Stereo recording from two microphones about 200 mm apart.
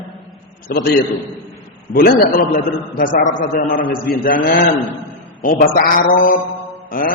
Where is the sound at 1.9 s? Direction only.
50° left (ahead or behind).